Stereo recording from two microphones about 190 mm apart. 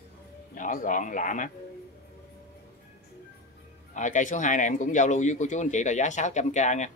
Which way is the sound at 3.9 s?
40° left (ahead or behind).